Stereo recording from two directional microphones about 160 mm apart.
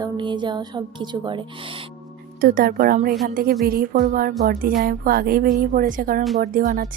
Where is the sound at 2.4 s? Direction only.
65° right (ahead or behind).